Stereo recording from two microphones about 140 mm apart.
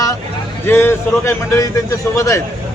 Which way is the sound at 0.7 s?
15° left (ahead or behind).